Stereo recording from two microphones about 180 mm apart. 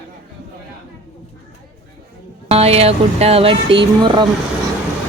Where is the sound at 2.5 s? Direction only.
35° right (ahead or behind).